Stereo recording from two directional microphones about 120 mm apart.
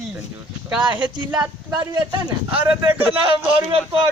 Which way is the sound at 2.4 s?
15° right (ahead or behind).